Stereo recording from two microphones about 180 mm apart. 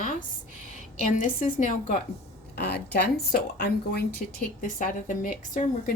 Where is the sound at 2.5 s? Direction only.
65° left (ahead or behind).